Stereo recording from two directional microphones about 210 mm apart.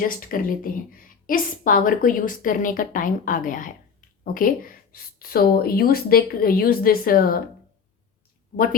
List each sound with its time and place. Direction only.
0.0 s a woman's voice: 40° left (ahead or behind)